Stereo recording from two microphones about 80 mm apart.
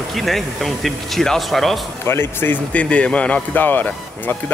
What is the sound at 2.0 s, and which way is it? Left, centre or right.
Speech, left.